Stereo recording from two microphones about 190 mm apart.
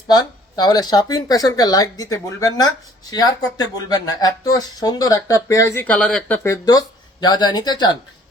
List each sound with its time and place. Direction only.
0.1 s speech: 20° left (ahead or behind)